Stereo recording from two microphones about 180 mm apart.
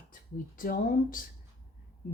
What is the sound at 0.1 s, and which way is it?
Speech, 50° left (ahead or behind).